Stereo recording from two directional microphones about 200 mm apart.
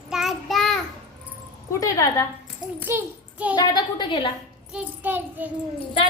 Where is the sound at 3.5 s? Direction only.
20° left (ahead or behind).